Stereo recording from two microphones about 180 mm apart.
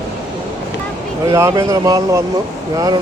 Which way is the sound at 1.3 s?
20° right (ahead or behind).